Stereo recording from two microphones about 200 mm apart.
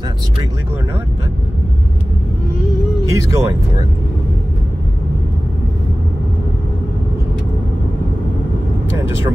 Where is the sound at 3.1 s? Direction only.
15° right (ahead or behind).